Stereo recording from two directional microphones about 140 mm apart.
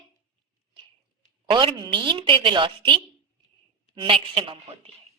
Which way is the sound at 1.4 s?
35° right (ahead or behind).